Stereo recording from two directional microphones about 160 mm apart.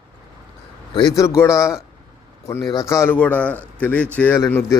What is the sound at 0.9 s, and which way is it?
A man's voice, 25° left (ahead or behind).